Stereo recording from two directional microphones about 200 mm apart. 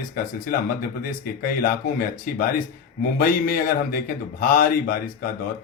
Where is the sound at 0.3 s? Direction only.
45° left (ahead or behind).